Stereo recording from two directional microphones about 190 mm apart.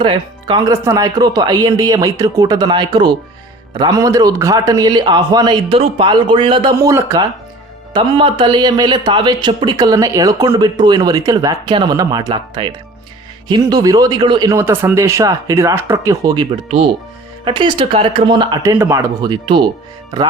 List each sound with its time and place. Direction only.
0.0 s a man's voice: 25° right (ahead or behind)
16.6 s a man's voice: 35° right (ahead or behind)